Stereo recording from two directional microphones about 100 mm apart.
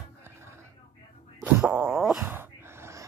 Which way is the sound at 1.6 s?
10° right (ahead or behind).